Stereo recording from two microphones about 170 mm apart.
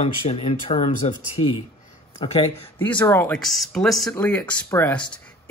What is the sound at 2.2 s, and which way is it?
Speech, 30° left (ahead or behind).